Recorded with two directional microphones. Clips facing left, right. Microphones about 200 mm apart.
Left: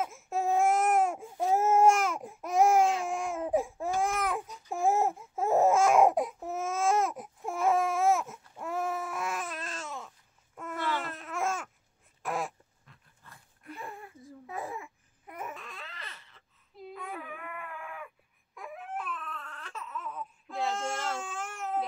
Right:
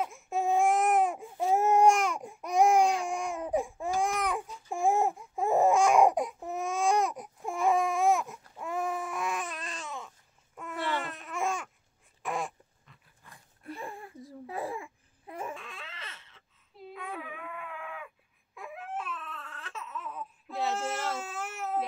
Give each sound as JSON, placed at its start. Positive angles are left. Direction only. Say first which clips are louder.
{"t": 0.0, "sound": "baby cry", "louder": "right 1 dB", "side_deg": 0}
{"t": 12.2, "sound": "dog", "louder": "even", "side_deg": 0}
{"t": 13.2, "sound": "dog", "louder": "even", "side_deg": -15}
{"t": 13.7, "sound": "a sound", "louder": "right 2 dB", "side_deg": -35}
{"t": 15.5, "sound": "baby cry", "louder": "right 1 dB", "side_deg": 0}